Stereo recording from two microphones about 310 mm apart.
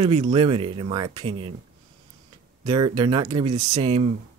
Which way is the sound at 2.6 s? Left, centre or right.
Centre.